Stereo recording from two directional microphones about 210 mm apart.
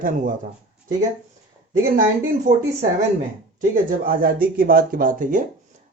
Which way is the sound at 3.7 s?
40° right (ahead or behind).